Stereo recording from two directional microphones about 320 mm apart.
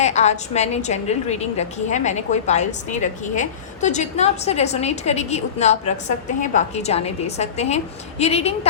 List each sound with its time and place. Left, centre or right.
0.0 s a woman's voice: left